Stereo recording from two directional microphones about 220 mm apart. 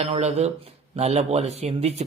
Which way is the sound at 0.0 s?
30° right (ahead or behind).